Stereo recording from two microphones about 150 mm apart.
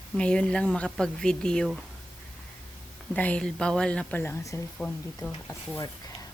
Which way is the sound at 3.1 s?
10° left (ahead or behind).